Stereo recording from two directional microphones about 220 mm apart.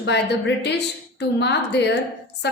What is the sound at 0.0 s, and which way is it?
A woman's voice, 50° left (ahead or behind).